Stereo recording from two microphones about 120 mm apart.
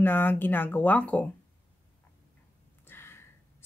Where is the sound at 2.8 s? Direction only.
20° left (ahead or behind).